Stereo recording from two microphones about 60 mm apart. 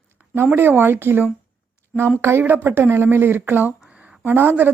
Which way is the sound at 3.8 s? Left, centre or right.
Centre.